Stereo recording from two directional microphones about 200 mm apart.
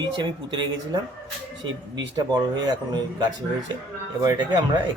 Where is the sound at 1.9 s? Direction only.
60° right (ahead or behind).